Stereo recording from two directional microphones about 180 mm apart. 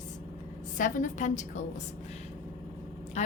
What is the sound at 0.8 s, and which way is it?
Speech, 45° left (ahead or behind).